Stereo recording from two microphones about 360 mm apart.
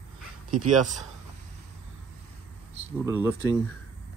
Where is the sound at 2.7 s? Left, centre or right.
Centre.